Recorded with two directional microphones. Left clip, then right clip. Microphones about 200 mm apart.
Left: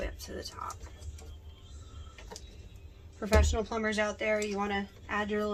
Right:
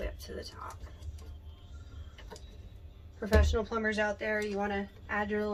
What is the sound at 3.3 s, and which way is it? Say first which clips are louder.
Speech: left 1 dB; 40° left (ahead or behind).